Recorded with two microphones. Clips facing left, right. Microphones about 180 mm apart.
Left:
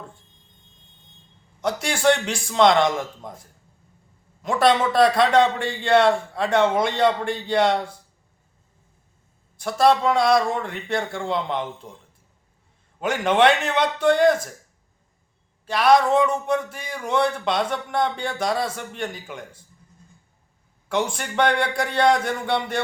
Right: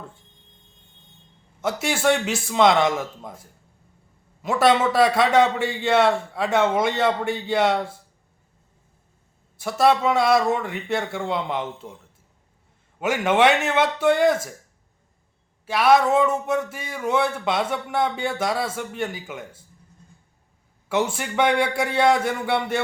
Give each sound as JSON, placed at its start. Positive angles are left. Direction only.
{"t": 1.6, "sound": "speech", "side_deg": -5}
{"t": 4.4, "sound": "speech", "side_deg": -5}
{"t": 9.6, "sound": "speech", "side_deg": -5}
{"t": 13.0, "sound": "speech", "side_deg": -5}
{"t": 15.6, "sound": "speech", "side_deg": -5}
{"t": 20.9, "sound": "speech", "side_deg": -5}